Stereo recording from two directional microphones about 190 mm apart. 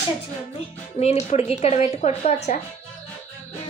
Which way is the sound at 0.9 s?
35° left (ahead or behind).